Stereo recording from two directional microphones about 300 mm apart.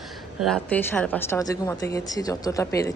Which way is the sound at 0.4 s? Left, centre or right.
Centre.